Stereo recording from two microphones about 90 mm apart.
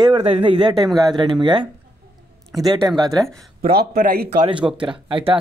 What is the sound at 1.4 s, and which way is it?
Speech, 60° right (ahead or behind).